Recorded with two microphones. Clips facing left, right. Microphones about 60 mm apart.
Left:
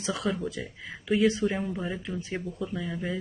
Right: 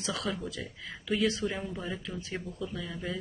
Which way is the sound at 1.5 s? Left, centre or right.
Centre.